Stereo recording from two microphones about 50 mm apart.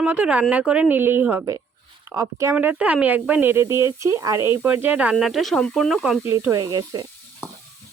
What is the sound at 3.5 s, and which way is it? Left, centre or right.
Speech, right.